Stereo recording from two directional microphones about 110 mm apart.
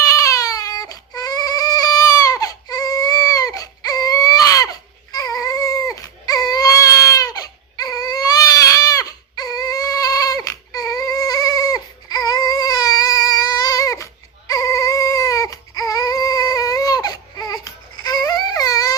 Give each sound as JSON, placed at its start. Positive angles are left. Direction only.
{"t": 0.0, "sound": "baby cry", "side_deg": 30}